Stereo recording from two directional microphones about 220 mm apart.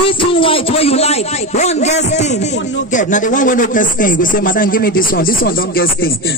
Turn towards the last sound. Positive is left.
turn(degrees=45)  # may be behind; listen again after turning